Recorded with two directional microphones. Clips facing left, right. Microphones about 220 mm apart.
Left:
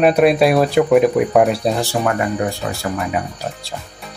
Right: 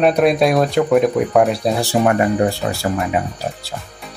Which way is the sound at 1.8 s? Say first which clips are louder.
Right 3 dB; 15° right (ahead or behind).